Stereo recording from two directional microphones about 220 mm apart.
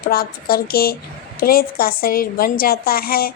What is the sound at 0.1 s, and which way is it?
A woman's voice, 40° left (ahead or behind).